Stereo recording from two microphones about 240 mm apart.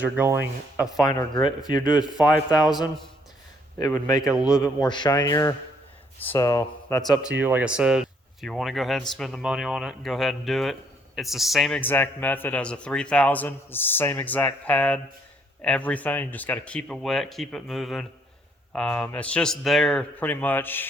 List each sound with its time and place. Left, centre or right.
0.0 s speech: centre
1.0 s speech: centre
2.0 s a man's voice: centre
2.2 s speech: centre
3.8 s speech: centre
4.2 s a man's voice: centre
4.6 s speech: centre
7.2 s a man's voice: centre